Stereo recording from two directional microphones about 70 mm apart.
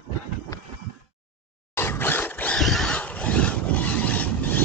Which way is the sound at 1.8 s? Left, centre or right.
Left.